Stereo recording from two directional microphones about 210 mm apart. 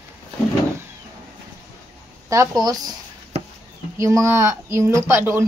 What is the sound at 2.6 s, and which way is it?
Speech, 20° right (ahead or behind).